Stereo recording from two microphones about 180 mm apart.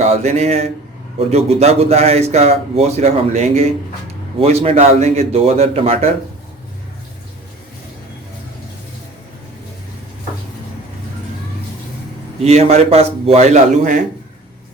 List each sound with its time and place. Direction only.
0.0 s speech: 35° right (ahead or behind)
12.4 s speech: 35° right (ahead or behind)